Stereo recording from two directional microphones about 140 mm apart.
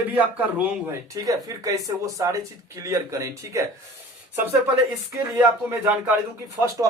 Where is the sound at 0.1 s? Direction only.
10° right (ahead or behind).